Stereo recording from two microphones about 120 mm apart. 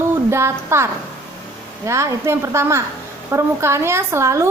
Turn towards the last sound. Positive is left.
turn(degrees=-25)  # may be behind; listen again after turning